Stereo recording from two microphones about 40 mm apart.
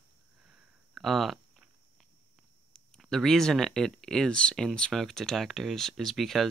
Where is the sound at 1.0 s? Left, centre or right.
Centre.